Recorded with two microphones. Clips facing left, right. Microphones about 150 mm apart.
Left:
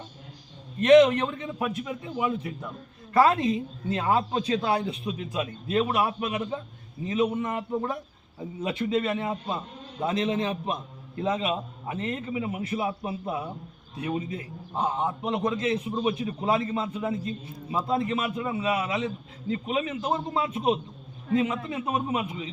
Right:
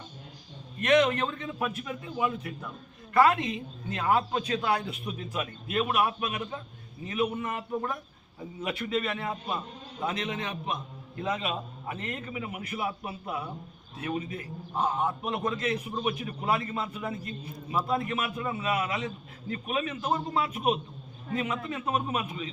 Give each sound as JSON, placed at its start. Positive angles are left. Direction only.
{"t": 0.8, "sound": "a man's voice", "side_deg": 25}
{"t": 3.1, "sound": "a man's voice", "side_deg": 30}
{"t": 10.0, "sound": "a man's voice", "side_deg": 30}